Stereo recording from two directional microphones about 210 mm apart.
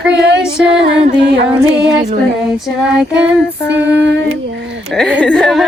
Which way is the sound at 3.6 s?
55° right (ahead or behind).